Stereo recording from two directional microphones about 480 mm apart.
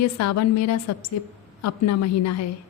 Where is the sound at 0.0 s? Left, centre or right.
Left.